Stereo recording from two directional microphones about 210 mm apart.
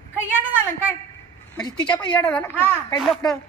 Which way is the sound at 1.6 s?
20° left (ahead or behind).